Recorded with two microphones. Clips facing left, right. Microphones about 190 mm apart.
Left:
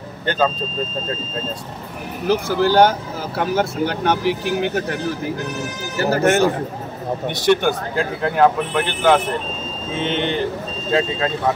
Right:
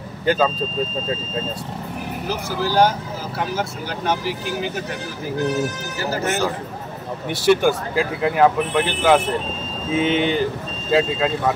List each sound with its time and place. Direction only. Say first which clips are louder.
0.2 s speech: right 1 dB; 5° right (ahead or behind)
2.2 s speech: left 8 dB; 60° left (ahead or behind)
5.9 s speech: left 8 dB; 60° left (ahead or behind)
7.2 s speech: right 1 dB; 5° right (ahead or behind)